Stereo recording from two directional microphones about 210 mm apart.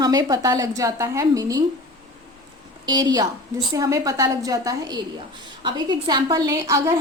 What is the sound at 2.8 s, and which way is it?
A woman's voice, 20° right (ahead or behind).